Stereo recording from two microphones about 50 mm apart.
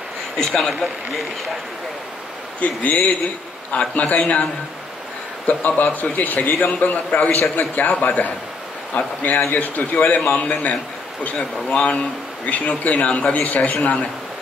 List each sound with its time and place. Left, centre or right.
0.4 s a man's voice: centre
2.6 s a man's voice: left
5.5 s a man's voice: left